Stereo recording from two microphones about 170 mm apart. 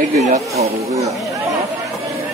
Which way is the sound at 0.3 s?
40° right (ahead or behind).